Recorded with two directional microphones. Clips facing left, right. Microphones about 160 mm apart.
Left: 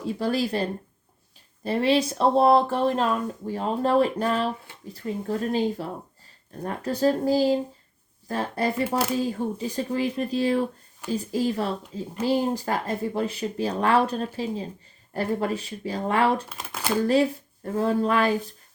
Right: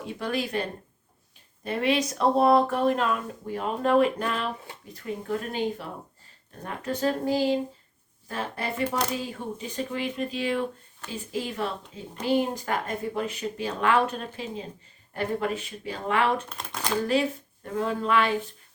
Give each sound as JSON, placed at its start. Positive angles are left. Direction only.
{"t": 0.0, "sound": "speech", "side_deg": 35}
{"t": 16.5, "sound": "speech", "side_deg": 5}
{"t": 17.7, "sound": "speech", "side_deg": 40}